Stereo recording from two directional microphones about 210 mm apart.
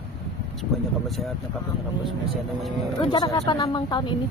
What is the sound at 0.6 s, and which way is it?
Speech, centre (ahead or behind).